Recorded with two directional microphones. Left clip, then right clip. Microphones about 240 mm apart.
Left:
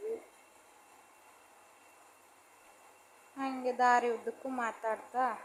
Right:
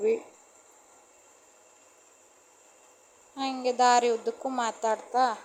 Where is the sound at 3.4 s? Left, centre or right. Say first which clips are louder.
Right 6 dB; centre.